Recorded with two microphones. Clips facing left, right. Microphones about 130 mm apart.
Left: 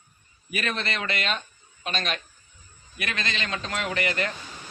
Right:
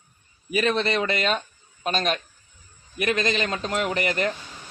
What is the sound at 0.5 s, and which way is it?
A man's voice, 30° right (ahead or behind).